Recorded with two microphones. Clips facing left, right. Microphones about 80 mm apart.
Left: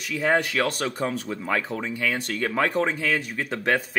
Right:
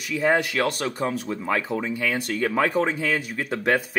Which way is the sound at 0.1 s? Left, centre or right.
Centre.